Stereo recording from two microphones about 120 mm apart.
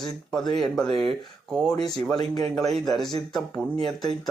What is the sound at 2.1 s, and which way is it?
Speech, 35° left (ahead or behind).